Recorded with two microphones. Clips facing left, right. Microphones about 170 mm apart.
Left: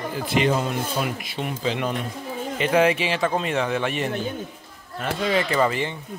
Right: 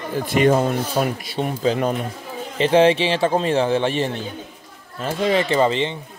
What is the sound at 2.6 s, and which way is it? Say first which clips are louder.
A man's voice: right 5 dB; 30° right (ahead or behind).